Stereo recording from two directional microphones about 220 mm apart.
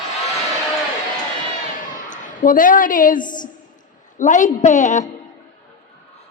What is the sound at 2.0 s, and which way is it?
A woman's voice, 35° left (ahead or behind).